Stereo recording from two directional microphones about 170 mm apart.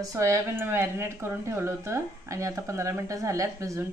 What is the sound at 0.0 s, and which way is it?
A woman's voice, 20° right (ahead or behind).